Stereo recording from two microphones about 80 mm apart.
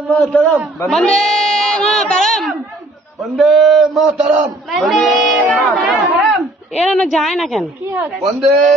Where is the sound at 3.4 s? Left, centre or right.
Centre.